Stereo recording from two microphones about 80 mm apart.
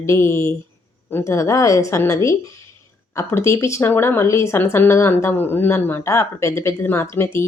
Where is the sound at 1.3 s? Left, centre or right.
Left.